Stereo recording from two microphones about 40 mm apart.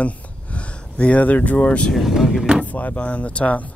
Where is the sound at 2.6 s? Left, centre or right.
Left.